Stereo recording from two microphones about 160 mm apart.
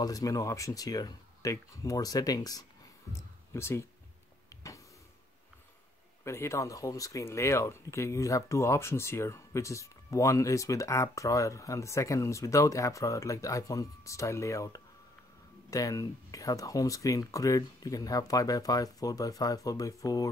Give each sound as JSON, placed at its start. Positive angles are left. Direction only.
{"t": 0.0, "sound": "speech", "side_deg": 20}
{"t": 6.2, "sound": "speech", "side_deg": 15}